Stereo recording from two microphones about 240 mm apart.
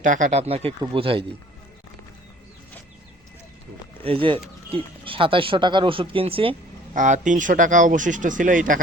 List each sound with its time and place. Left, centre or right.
0.0 s speech: right
4.0 s speech: right